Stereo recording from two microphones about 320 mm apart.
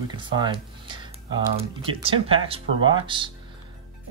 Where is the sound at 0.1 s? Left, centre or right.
Centre.